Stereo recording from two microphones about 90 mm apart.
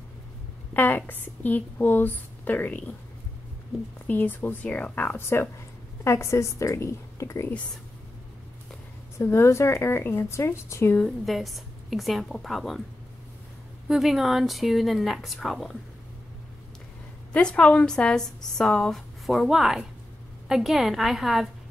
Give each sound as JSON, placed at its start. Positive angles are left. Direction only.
{"t": 0.7, "sound": "a woman's voice", "side_deg": 20}
{"t": 4.1, "sound": "a woman's voice", "side_deg": 20}
{"t": 9.2, "sound": "a woman's voice", "side_deg": 30}
{"t": 11.2, "sound": "speech", "side_deg": 0}
{"t": 13.8, "sound": "speech", "side_deg": -5}
{"t": 17.3, "sound": "a woman's voice", "side_deg": 10}